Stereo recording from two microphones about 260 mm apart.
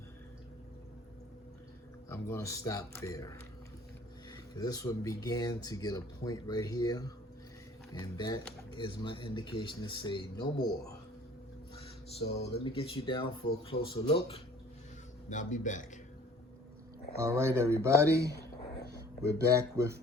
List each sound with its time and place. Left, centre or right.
2.0 s speech: centre
12.4 s speech: left
17.2 s speech: centre